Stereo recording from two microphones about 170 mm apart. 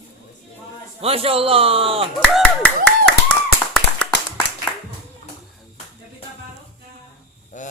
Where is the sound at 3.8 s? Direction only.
80° left.